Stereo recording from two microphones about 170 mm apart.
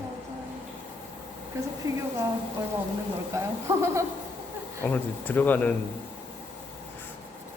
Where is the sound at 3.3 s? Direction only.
15° right (ahead or behind).